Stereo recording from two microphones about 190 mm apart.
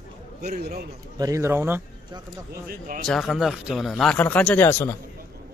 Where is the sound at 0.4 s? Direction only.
55° right (ahead or behind).